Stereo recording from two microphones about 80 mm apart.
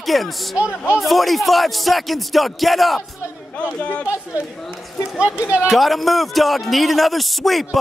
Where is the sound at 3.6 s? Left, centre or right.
Centre.